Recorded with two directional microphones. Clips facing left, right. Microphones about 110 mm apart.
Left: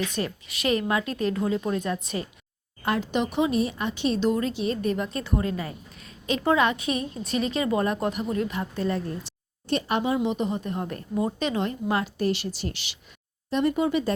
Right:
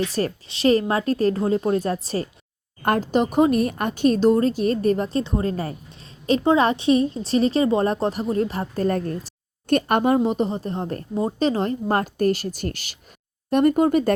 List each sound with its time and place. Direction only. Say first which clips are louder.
0.0 s a woman's voice: right 5 dB; 40° right (ahead or behind)
5.2 s a woman's voice: right 3 dB; 25° right (ahead or behind)
5.5 s a woman's voice: right 4 dB; 40° right (ahead or behind)
10.2 s a woman's voice: right 5 dB; 35° right (ahead or behind)